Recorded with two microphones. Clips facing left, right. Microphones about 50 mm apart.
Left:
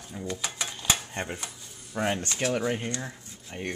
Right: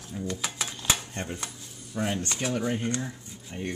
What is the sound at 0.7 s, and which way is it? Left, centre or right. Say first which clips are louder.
Dishes: left 1 dB; centre.